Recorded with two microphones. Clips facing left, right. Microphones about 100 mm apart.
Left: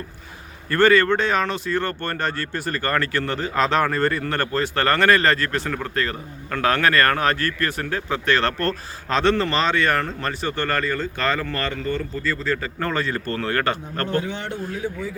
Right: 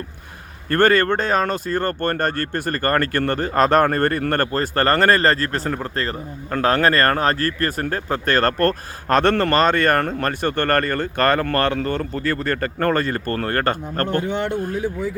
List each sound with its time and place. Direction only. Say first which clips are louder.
0.7 s speech: even; 50° right (ahead or behind)